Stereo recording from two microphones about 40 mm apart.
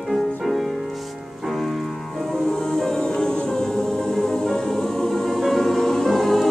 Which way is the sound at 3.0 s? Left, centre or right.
Centre.